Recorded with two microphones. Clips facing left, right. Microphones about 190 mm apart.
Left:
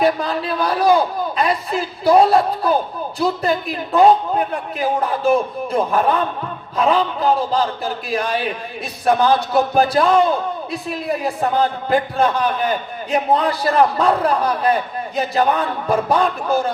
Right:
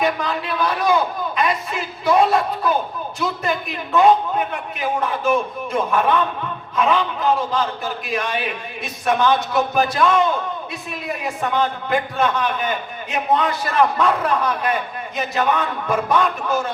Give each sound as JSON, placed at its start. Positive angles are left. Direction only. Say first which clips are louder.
{"t": 0.0, "sound": "a man's voice", "louder": "left 4 dB", "side_deg": 35}